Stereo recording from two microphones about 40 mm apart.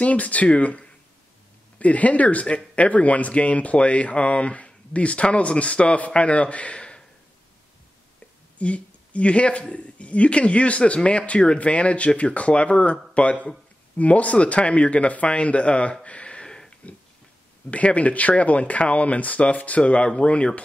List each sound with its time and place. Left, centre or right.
0.0 s speech: left
8.5 s speech: left
16.8 s a sound: left
17.6 s speech: left